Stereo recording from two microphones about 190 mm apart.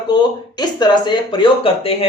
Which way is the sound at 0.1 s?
20° left (ahead or behind).